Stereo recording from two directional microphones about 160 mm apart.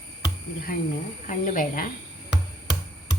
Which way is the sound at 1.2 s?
55° left (ahead or behind).